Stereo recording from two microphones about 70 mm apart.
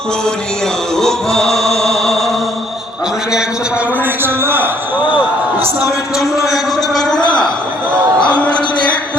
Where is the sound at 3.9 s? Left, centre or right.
Right.